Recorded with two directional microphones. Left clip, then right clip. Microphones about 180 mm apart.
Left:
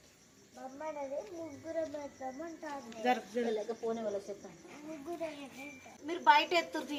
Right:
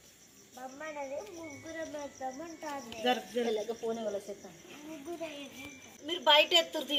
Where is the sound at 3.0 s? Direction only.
20° right (ahead or behind).